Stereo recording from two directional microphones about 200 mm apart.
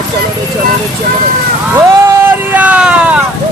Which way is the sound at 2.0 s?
10° right (ahead or behind).